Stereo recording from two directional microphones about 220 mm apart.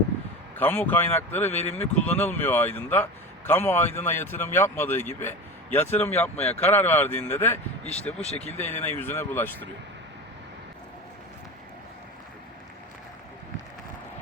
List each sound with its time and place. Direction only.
0.5 s a man's voice: 10° left (ahead or behind)
1.5 s speech: 30° left (ahead or behind)
2.0 s a man's voice: 5° left (ahead or behind)
6.3 s speech: 30° left (ahead or behind)
6.6 s a man's voice: 10° left (ahead or behind)
7.9 s speech: 30° left (ahead or behind)
8.5 s a man's voice: 10° left (ahead or behind)